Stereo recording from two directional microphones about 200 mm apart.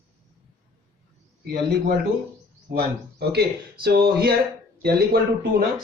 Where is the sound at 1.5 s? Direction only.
50° right (ahead or behind).